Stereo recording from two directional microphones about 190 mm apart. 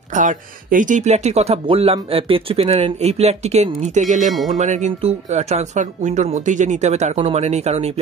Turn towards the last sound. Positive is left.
turn(degrees=-35)  # may be behind; listen again after turning